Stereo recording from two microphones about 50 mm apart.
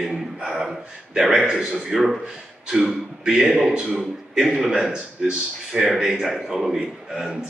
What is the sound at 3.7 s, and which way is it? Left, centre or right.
Speech, right.